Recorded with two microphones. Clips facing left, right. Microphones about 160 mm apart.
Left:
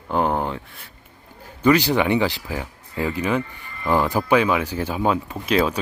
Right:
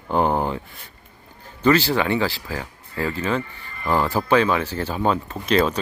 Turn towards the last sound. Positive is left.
turn(degrees=5)  # may be behind; listen again after turning